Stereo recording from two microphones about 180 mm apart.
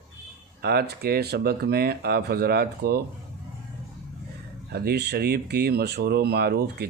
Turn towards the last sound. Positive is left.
turn(degrees=-65)  # may be behind; listen again after turning